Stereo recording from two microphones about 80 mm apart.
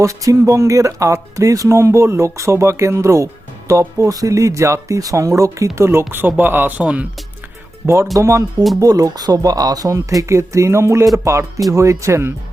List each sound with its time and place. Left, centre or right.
0.0 s speech: right; by 7.1 s centre
8.1 s speech: right